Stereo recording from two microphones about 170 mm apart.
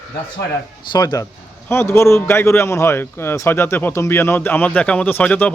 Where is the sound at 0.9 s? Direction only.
25° left (ahead or behind).